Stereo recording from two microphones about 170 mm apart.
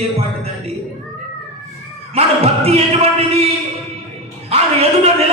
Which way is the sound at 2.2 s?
35° right (ahead or behind).